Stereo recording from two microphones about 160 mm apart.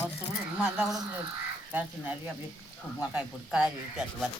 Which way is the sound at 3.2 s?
5° right (ahead or behind).